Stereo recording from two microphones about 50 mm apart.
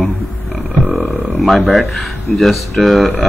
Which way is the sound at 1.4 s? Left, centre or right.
Centre.